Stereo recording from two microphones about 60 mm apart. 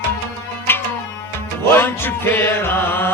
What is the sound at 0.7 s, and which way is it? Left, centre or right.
Music, left.